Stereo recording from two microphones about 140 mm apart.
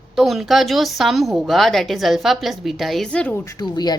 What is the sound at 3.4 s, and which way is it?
Speech, 25° left (ahead or behind).